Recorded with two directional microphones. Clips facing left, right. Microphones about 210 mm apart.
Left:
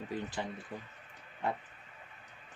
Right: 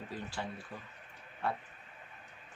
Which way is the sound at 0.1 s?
20° left (ahead or behind).